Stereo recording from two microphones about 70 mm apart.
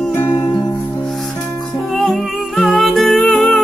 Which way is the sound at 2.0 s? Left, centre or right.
Centre.